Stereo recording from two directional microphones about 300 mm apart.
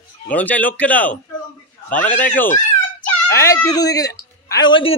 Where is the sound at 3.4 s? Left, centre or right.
Centre.